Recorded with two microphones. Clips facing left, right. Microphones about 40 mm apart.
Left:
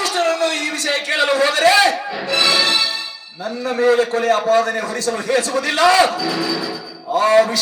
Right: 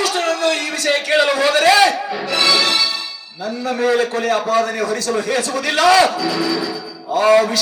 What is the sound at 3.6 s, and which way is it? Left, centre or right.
A man's voice, left.